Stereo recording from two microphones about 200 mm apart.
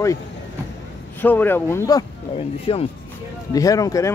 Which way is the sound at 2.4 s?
30° left (ahead or behind).